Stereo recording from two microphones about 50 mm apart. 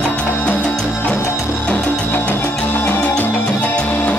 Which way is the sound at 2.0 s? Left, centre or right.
Left.